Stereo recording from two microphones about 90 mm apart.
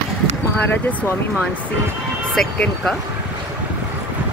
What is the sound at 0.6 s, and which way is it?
Speech, 20° left (ahead or behind).